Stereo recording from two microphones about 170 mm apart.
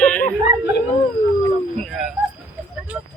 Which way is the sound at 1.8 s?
Centre (ahead or behind).